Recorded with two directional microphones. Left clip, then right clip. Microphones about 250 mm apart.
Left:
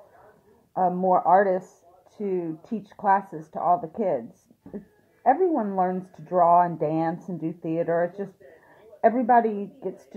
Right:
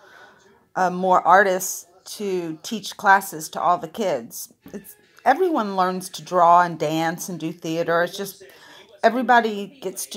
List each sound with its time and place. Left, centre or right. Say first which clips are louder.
0.7 s speech: right 3 dB; right
5.2 s speech: right 3 dB; centre